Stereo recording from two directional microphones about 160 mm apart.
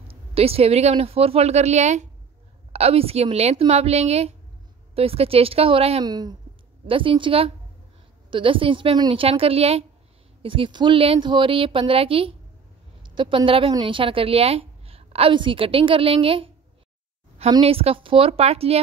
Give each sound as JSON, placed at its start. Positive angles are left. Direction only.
{"t": 0.1, "sound": "a woman's voice", "side_deg": -35}
{"t": 6.0, "sound": "a woman's voice", "side_deg": -25}